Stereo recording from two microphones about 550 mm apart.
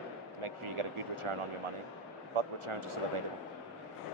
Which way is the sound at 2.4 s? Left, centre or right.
Right.